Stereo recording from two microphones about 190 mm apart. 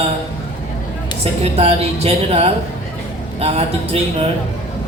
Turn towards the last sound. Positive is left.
turn(degrees=-35)  # may be behind; listen again after turning